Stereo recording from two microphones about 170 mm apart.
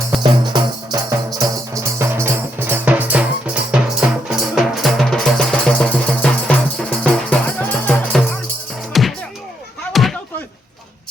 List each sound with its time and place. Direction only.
0.2 s music: 25° right (ahead or behind); by 9.1 s centre (ahead or behind)
9.9 s slam: centre (ahead or behind)